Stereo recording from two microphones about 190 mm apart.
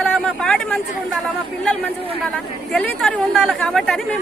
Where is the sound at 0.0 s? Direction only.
5° left (ahead or behind).